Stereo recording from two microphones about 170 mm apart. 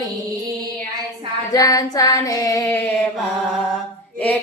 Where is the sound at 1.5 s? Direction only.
20° left (ahead or behind).